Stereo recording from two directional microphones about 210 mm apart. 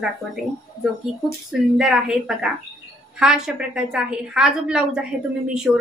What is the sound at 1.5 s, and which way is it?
A woman's voice, centre (ahead or behind).